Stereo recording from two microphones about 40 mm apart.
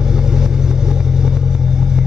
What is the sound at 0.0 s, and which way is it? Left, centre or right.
Vehicle, centre.